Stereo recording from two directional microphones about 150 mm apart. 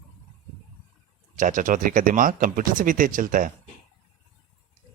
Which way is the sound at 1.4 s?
60° right (ahead or behind).